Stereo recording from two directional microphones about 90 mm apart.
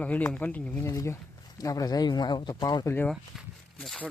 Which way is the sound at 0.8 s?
35° left (ahead or behind).